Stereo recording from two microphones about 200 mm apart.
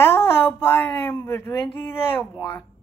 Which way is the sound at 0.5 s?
10° left (ahead or behind).